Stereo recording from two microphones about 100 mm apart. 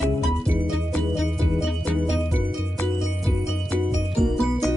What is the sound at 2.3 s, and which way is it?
Music, 20° right (ahead or behind).